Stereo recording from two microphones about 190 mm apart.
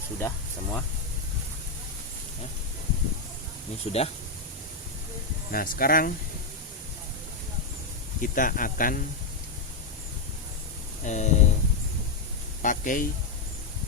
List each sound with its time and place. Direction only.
0.2 s speech: 10° left (ahead or behind)
3.9 s speech: 35° left (ahead or behind)
5.5 s speech: 50° left (ahead or behind)
8.2 s speech: 45° left (ahead or behind)
11.0 s speech: 40° left (ahead or behind)
12.6 s speech: 45° left (ahead or behind)